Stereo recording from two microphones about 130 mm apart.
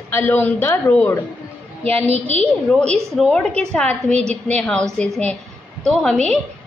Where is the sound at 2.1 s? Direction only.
55° right (ahead or behind).